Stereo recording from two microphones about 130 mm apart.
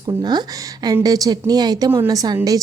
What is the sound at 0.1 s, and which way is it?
A woman's voice, 35° right (ahead or behind).